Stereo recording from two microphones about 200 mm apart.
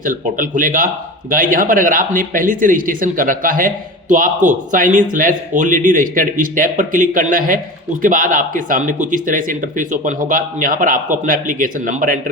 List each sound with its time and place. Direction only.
0.0 s speech: 40° right (ahead or behind)